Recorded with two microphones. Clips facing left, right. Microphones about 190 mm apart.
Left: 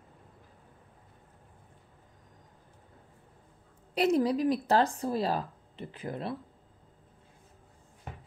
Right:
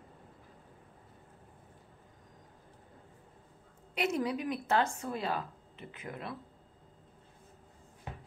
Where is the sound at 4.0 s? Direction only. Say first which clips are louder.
Left 7 dB; 35° left (ahead or behind).